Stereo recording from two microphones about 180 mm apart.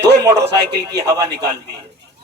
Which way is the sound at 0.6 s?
65° right (ahead or behind).